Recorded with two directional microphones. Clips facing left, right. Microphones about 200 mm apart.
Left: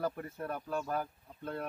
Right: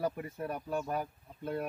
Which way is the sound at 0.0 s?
10° right (ahead or behind).